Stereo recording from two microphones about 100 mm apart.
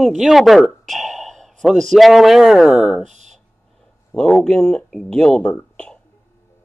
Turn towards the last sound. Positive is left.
turn(degrees=10)  # may be behind; listen again after turning